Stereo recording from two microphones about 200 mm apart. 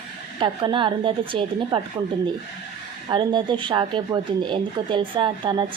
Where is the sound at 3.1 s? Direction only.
25° right (ahead or behind).